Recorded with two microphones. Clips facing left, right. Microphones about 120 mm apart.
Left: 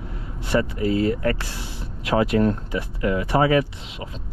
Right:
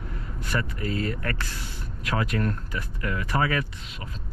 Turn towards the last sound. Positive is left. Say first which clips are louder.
# left 7 dB
turn(degrees=25)  # may be behind; listen again after turning